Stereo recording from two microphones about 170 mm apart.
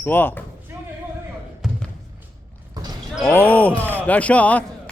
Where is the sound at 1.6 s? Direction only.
Centre (ahead or behind).